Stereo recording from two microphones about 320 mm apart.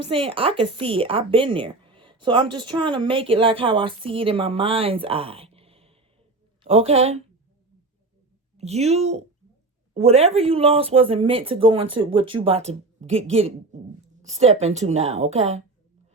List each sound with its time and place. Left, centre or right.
0.0 s a woman's voice: centre
8.5 s a woman's voice: centre